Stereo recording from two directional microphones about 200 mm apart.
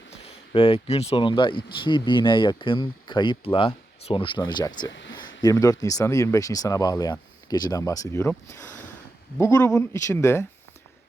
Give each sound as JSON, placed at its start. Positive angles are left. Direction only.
{"t": 0.1, "sound": "speech", "side_deg": 30}
{"t": 4.9, "sound": "speech", "side_deg": 65}
{"t": 5.4, "sound": "speech", "side_deg": 15}